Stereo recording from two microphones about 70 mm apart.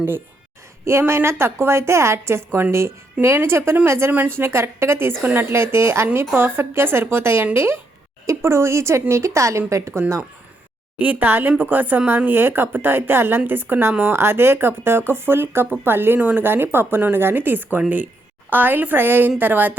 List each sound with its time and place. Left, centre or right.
0.9 s speech: right
10.9 s speech: right